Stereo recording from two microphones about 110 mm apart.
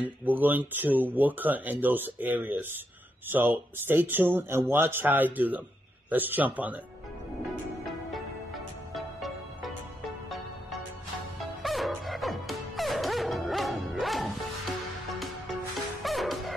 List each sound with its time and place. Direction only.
0.0 s speech: 15° right (ahead or behind)
8.9 s music: centre (ahead or behind)
11.6 s music: centre (ahead or behind)
16.0 s music: centre (ahead or behind)